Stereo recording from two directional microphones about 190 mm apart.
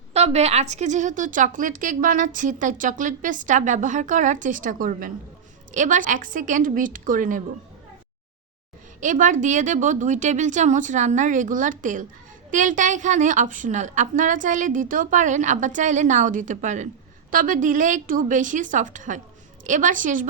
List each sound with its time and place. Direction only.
0.1 s a woman's voice: 35° right (ahead or behind)
9.0 s a woman's voice: 45° right (ahead or behind)